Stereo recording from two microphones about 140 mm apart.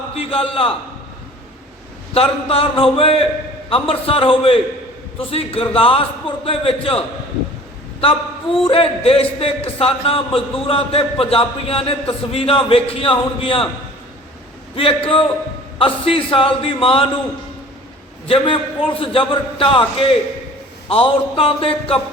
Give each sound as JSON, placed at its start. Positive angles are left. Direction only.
{"t": 0.2, "sound": "a man's voice", "side_deg": 40}
{"t": 2.1, "sound": "a man's voice", "side_deg": 45}
{"t": 8.0, "sound": "a man's voice", "side_deg": 40}
{"t": 14.8, "sound": "a man's voice", "side_deg": 40}
{"t": 18.3, "sound": "a man's voice", "side_deg": 40}